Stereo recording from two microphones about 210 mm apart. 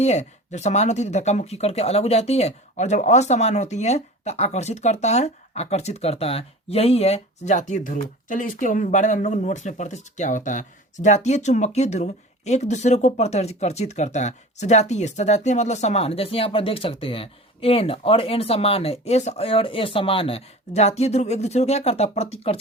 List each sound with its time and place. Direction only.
0.0 s speech: 35° left (ahead or behind)